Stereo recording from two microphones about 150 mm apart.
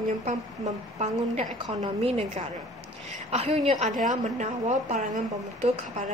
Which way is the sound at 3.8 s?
60° right (ahead or behind).